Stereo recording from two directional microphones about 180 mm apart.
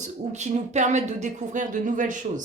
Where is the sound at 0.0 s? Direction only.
40° right (ahead or behind).